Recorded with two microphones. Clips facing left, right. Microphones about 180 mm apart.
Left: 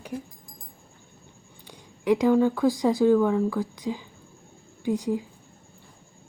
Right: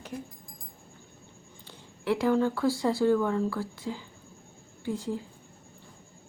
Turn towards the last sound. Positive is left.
turn(degrees=15)  # may be behind; listen again after turning